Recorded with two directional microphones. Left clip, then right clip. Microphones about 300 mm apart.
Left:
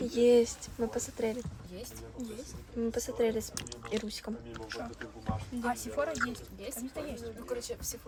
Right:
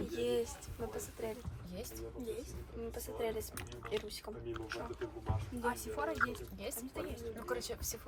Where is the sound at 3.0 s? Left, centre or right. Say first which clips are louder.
Left 7 dB; left.